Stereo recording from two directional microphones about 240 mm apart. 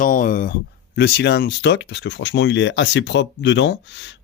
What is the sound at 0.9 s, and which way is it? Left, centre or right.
Speech, left.